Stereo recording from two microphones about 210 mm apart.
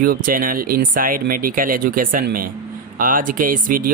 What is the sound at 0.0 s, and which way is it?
Speech, 40° right (ahead or behind).